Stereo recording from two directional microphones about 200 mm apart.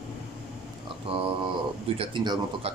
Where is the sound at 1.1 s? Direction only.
30° right (ahead or behind).